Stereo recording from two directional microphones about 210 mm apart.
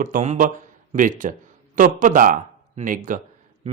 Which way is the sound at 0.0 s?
35° right (ahead or behind).